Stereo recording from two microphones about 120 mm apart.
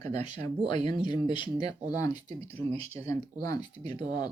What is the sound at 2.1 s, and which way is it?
Speech, 65° right (ahead or behind).